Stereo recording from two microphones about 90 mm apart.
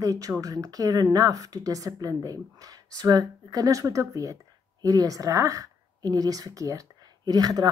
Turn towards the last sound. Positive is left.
turn(degrees=-45)  # may be behind; listen again after turning